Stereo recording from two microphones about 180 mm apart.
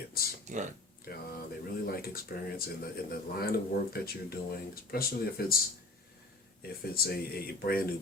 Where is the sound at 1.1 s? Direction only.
55° left (ahead or behind).